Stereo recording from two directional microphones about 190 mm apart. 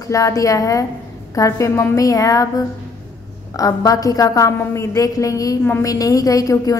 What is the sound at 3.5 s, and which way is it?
A woman's voice, 20° left (ahead or behind).